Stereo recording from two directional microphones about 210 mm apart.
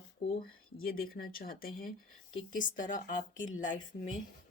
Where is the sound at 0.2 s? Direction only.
30° left (ahead or behind).